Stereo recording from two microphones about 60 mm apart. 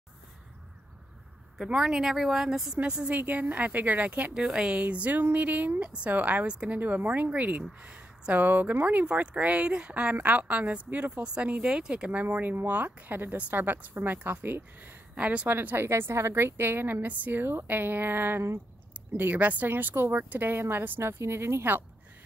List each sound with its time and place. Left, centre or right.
1.7 s speech: centre
2.8 s speech: centre
3.2 s speech: right
4.3 s speech: centre
6.8 s a woman's voice: right
15.1 s speech: right
15.9 s a woman's voice: right